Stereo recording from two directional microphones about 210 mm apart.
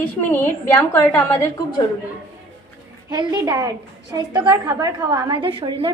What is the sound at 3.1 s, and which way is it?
A woman's voice, 20° right (ahead or behind).